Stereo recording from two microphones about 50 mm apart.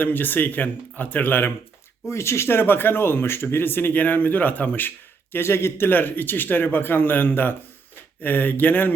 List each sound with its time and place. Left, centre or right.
0.0 s speech: left
2.0 s speech: left
3.9 s speech: left
5.3 s speech: left
5.9 s speech: left